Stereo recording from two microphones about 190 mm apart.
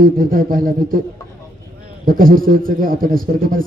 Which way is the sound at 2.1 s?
50° right (ahead or behind).